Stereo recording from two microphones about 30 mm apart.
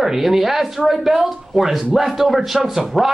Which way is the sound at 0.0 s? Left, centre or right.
Centre.